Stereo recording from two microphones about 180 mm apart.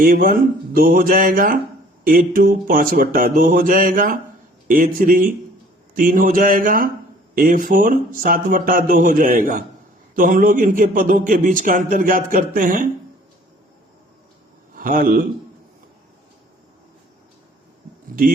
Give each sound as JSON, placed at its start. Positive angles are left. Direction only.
{"t": 0.0, "sound": "a man's voice", "side_deg": -55}
{"t": 14.7, "sound": "speech", "side_deg": -50}